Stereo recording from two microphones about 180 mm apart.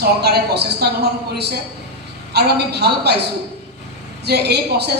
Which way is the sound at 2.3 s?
65° right (ahead or behind).